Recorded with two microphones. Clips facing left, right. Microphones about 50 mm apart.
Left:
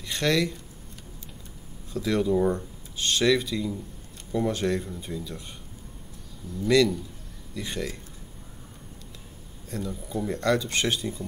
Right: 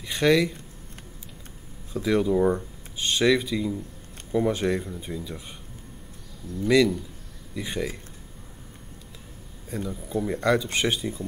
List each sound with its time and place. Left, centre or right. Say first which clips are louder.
0.0 s speech: right 4 dB; centre
1.9 s speech: right 2 dB; centre
6.7 s speech: right 1 dB; centre
9.7 s speech: right 2 dB; centre